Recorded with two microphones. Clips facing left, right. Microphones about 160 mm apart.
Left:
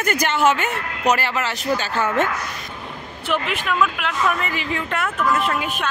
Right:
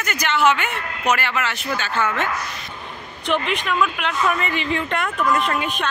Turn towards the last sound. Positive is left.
turn(degrees=5)  # may be behind; listen again after turning